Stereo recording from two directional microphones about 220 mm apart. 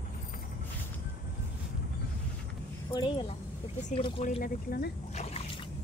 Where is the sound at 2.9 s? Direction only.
20° left (ahead or behind); by 4.9 s 45° left (ahead or behind).